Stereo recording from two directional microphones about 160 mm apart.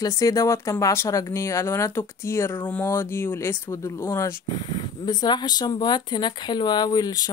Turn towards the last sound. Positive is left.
turn(degrees=25)  # may be behind; listen again after turning